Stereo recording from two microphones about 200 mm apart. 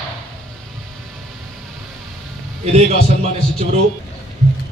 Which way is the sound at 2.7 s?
30° right (ahead or behind).